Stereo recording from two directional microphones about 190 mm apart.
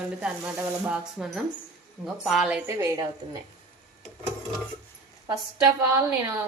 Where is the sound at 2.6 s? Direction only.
15° right (ahead or behind).